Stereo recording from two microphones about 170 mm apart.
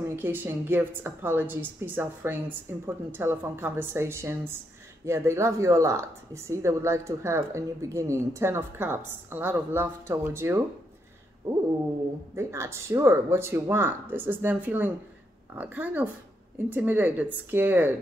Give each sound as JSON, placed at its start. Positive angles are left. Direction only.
{"t": 0.1, "sound": "a woman's voice", "side_deg": -10}